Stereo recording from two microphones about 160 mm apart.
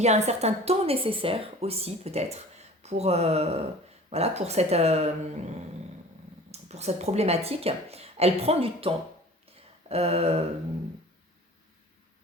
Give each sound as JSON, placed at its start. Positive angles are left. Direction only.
{"t": 0.0, "sound": "a woman's voice", "side_deg": -45}